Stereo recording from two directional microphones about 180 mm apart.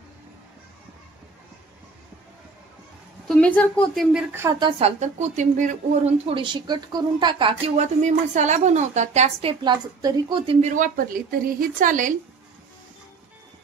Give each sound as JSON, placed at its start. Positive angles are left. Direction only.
{"t": 3.3, "sound": "a woman's voice", "side_deg": 5}
{"t": 4.6, "sound": "a woman's voice", "side_deg": -30}
{"t": 10.7, "sound": "a woman's voice", "side_deg": -50}